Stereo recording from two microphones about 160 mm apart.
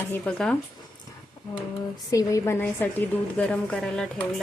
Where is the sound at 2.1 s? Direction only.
20° left (ahead or behind).